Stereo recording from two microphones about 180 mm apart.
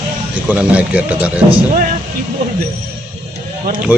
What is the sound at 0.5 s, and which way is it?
Speech, 10° right (ahead or behind).